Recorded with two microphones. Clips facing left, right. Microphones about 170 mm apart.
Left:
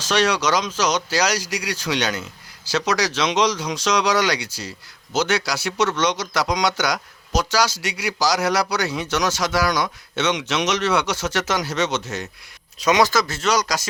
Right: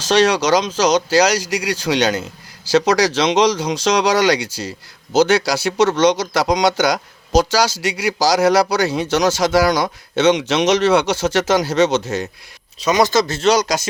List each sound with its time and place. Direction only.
0.0 s speech: 30° right (ahead or behind)